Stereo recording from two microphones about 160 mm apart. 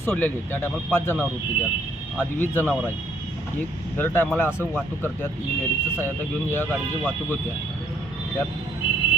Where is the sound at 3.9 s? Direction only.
10° left (ahead or behind).